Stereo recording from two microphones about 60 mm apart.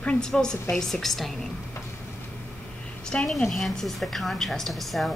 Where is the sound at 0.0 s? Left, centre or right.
Centre.